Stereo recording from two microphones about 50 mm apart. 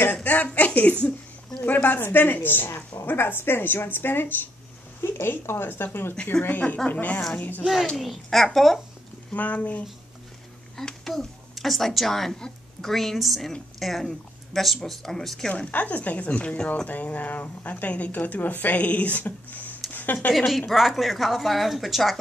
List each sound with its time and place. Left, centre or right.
0.1 s speech: left
0.6 s a sound: left
1.6 s a woman's voice: left
6.3 s a child's voice: centre
6.9 s speech: left
7.8 s a child's voice: centre
9.3 s speech: left
10.8 s a child's voice: centre
15.5 s speech: left
16.8 s speech: left
19.9 s a sound: left
20.3 s a woman's voice: centre